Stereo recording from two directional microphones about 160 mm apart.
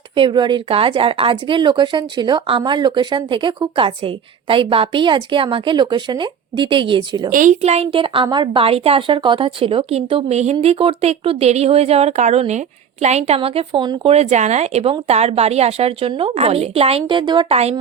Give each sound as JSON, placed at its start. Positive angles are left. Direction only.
{"t": 0.2, "sound": "a woman's voice", "side_deg": -30}
{"t": 7.3, "sound": "a woman's voice", "side_deg": -55}